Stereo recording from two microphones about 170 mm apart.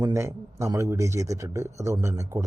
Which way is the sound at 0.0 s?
15° right (ahead or behind).